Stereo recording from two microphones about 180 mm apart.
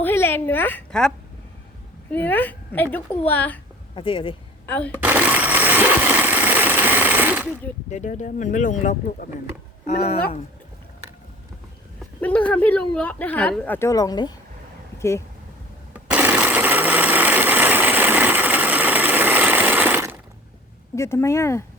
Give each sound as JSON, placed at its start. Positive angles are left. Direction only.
{"t": 0.0, "sound": "a woman's voice", "side_deg": 10}
{"t": 3.9, "sound": "speech", "side_deg": 30}
{"t": 4.6, "sound": "speech", "side_deg": 10}
{"t": 4.9, "sound": "a sound", "side_deg": -10}
{"t": 7.9, "sound": "speech", "side_deg": 40}
{"t": 12.2, "sound": "speech", "side_deg": 10}
{"t": 14.9, "sound": "vehicle", "side_deg": 15}
{"t": 15.9, "sound": "sewing machine", "side_deg": -10}
{"t": 20.9, "sound": "speech", "side_deg": 15}